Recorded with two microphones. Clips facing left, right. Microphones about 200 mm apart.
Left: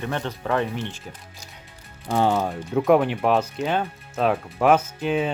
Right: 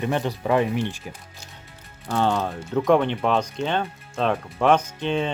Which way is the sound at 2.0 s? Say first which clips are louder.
Left 1 dB; 10° left (ahead or behind).